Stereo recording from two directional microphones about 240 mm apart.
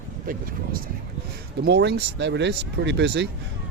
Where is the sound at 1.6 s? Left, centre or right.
Right.